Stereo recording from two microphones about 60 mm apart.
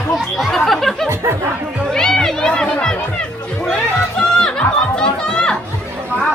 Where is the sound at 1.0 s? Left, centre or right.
Right.